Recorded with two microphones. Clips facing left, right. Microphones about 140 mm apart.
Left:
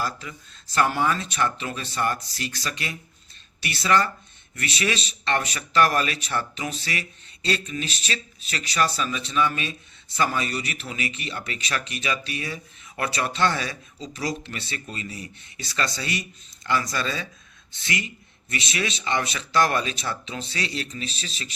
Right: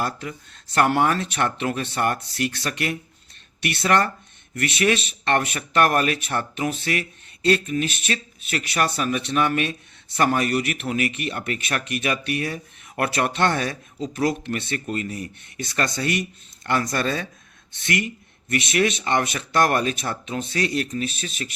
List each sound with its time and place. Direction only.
0.0 s speech: 55° right (ahead or behind)